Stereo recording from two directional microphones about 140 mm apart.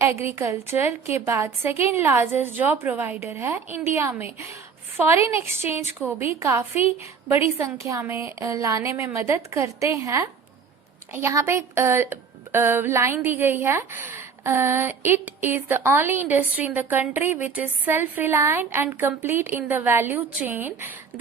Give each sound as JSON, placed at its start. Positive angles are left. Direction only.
{"t": 0.0, "sound": "a woman's voice", "side_deg": -20}